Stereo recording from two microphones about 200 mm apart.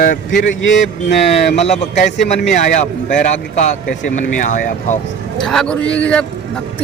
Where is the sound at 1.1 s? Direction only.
35° left (ahead or behind).